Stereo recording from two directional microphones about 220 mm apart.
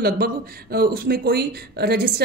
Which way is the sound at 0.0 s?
45° right (ahead or behind).